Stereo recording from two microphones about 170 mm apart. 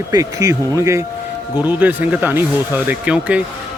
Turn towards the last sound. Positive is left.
turn(degrees=-5)  # may be behind; listen again after turning